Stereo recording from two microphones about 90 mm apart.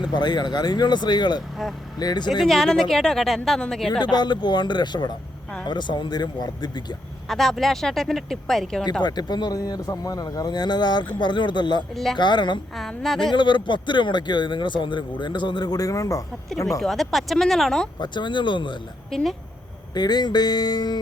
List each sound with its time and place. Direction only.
0.1 s speech: 55° left (ahead or behind)
2.4 s a woman's voice: 5° left (ahead or behind)
4.0 s speech: 55° left (ahead or behind)
7.3 s a woman's voice: 5° left (ahead or behind)
8.8 s speech: 55° left (ahead or behind)
12.7 s a woman's voice: centre (ahead or behind)
13.3 s speech: 60° left (ahead or behind); by 16.2 s 40° left (ahead or behind)
16.8 s a woman's voice: centre (ahead or behind)
18.0 s speech: 60° left (ahead or behind)
19.1 s a woman's voice: centre (ahead or behind)
19.9 s speech: 50° left (ahead or behind)